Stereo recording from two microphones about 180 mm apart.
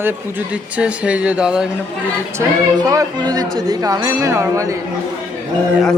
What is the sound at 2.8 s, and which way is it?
Speech, 20° right (ahead or behind).